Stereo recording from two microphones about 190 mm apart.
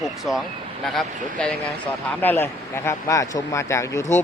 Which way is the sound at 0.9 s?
5° left (ahead or behind).